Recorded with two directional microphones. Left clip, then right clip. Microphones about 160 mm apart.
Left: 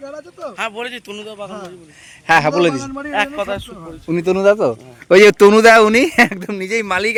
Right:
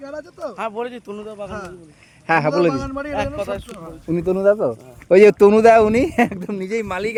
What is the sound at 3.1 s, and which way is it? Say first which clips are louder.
Speech: left 6 dB; 20° left (ahead or behind).